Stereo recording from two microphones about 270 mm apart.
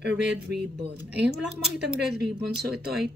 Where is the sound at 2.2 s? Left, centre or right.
Right.